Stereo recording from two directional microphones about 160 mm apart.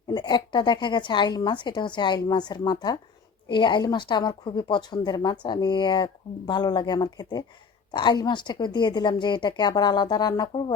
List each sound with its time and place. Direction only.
0.1 s speech: 25° left (ahead or behind)